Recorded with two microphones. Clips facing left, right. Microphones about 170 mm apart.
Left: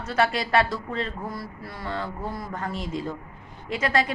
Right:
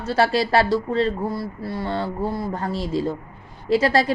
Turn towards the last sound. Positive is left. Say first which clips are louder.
# right 6 dB
turn(degrees=-35)  # may be behind; listen again after turning